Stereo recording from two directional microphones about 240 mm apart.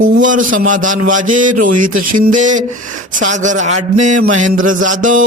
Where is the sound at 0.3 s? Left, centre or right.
Right.